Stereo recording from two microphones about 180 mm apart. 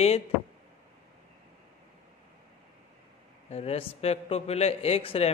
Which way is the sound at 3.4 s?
35° left (ahead or behind).